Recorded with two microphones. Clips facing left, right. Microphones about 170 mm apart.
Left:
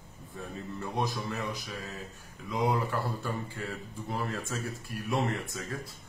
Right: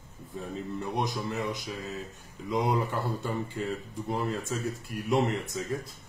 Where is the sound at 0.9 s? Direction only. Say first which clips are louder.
Right 1 dB; 20° right (ahead or behind).